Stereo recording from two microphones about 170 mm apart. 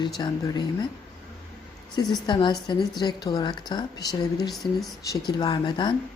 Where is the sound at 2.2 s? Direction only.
25° left (ahead or behind).